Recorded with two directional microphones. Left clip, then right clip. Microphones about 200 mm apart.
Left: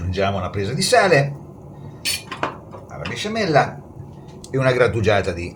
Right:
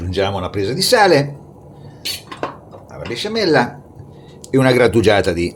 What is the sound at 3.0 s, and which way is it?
Speech, 45° right (ahead or behind).